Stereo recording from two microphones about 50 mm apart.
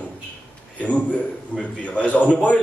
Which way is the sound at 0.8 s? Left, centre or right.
Left.